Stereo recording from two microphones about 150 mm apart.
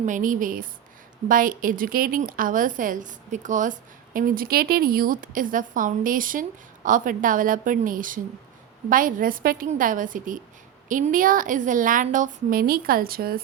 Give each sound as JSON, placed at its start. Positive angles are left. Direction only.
{"t": 0.0, "sound": "a woman's voice", "side_deg": -60}
{"t": 9.6, "sound": "a woman's voice", "side_deg": -60}